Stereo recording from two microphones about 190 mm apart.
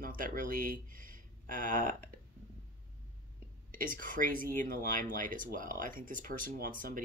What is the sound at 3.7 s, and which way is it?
Speech, 45° right (ahead or behind).